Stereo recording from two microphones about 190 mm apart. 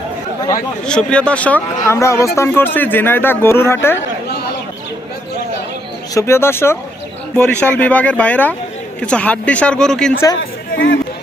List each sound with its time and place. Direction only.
0.9 s speech: 5° left (ahead or behind)
6.1 s speech: 15° left (ahead or behind)
10.8 s speech: 70° left (ahead or behind)